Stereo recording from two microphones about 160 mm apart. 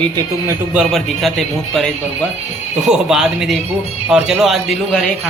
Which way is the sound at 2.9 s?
5° right (ahead or behind).